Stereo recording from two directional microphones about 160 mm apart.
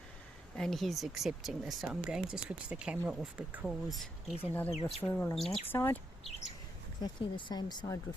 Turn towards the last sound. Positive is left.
turn(degrees=25)  # may be behind; listen again after turning